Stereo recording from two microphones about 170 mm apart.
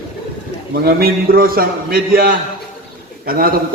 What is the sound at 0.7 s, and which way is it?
A man's voice, 60° right (ahead or behind).